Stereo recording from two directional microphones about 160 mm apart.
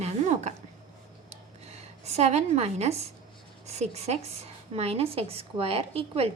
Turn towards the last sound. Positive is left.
turn(degrees=-40)  # may be behind; listen again after turning